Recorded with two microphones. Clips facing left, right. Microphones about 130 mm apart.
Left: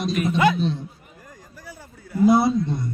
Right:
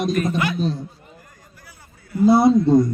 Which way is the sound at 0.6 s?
40° right (ahead or behind).